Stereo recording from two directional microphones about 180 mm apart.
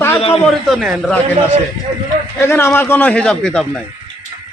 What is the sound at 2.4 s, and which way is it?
A man's voice, 15° left (ahead or behind).